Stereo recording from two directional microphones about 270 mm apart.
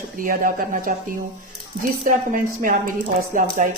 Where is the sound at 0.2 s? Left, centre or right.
Right.